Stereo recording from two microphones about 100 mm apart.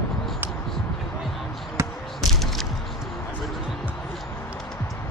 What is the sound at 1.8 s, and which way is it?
Basketball bounce, 30° right (ahead or behind).